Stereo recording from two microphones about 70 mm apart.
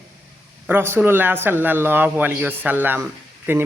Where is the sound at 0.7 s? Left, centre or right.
Right.